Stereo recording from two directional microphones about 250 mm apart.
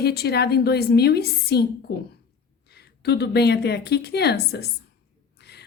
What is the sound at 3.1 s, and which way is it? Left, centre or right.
A woman's voice, left.